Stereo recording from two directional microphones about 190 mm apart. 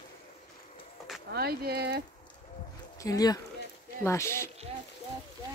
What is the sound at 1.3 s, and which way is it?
Speech, 55° right (ahead or behind).